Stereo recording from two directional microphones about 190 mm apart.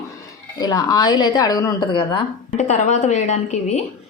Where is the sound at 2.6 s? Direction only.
40° left (ahead or behind).